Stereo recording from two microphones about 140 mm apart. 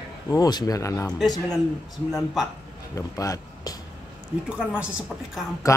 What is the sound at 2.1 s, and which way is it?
Speech, 10° right (ahead or behind).